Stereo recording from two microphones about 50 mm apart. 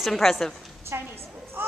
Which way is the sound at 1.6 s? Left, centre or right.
Right.